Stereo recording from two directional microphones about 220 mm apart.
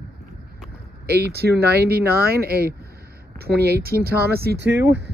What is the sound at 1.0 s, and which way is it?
Speech, 45° right (ahead or behind).